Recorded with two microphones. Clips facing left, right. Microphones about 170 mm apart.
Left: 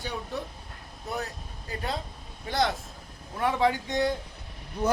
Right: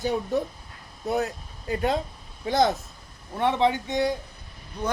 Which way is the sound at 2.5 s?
45° right (ahead or behind).